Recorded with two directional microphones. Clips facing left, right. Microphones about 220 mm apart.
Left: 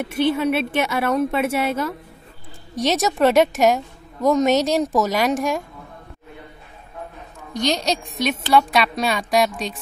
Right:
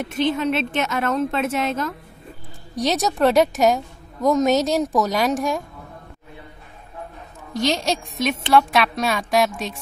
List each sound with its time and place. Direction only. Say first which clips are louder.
0.0 s a woman's voice: left 2 dB; 10° left (ahead or behind)
7.5 s a woman's voice: even; 5° right (ahead or behind)